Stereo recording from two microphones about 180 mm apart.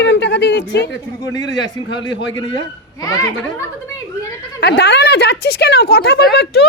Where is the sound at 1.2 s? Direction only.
20° left (ahead or behind).